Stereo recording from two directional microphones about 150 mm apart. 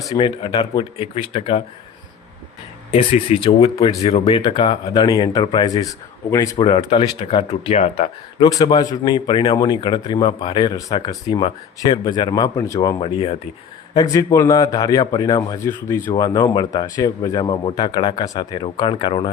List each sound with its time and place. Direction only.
0.1 s speech: 35° left (ahead or behind)
2.9 s speech: 45° left (ahead or behind)
4.2 s speech: 30° left (ahead or behind)
6.6 s speech: 35° left (ahead or behind)
8.4 s speech: 25° left (ahead or behind)
13.0 s speech: 35° left (ahead or behind)
13.9 s speech: 25° left (ahead or behind)